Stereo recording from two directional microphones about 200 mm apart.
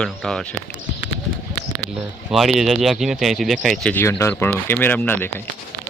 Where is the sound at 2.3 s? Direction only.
Centre (ahead or behind).